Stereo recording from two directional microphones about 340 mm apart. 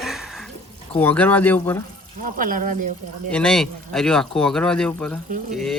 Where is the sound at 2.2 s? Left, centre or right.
Right.